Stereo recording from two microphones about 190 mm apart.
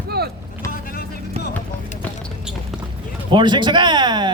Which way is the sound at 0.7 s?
50° left (ahead or behind).